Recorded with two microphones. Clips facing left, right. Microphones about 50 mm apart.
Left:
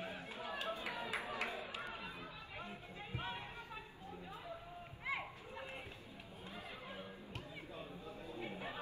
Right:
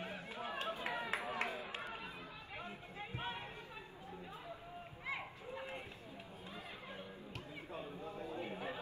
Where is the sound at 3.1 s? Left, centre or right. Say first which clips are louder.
Even; centre.